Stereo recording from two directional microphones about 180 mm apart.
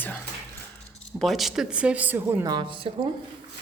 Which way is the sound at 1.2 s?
Centre (ahead or behind).